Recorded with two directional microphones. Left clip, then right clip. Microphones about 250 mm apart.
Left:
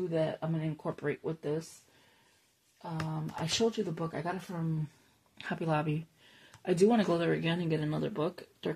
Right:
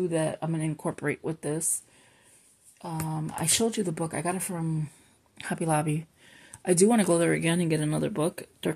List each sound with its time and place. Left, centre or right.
0.1 s speech: right
3.1 s speech: right
5.4 s speech: right